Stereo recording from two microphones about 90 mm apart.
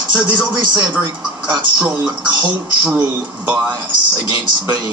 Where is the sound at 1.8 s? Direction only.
20° right (ahead or behind).